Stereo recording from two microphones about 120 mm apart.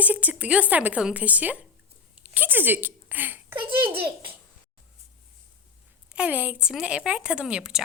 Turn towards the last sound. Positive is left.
turn(degrees=-5)  # may be behind; listen again after turning